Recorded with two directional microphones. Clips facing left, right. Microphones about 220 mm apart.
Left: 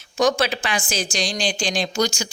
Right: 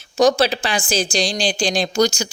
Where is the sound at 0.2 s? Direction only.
35° right (ahead or behind).